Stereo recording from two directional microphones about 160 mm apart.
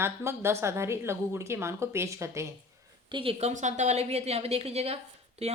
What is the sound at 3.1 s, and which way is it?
A woman's voice, 35° right (ahead or behind).